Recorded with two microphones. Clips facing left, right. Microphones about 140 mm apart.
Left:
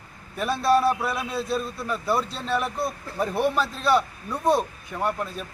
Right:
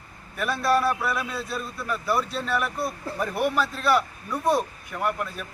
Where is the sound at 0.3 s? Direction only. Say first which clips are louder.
Left 2 dB; 25° left (ahead or behind).